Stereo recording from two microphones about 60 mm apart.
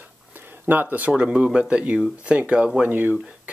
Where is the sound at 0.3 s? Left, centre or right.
Right.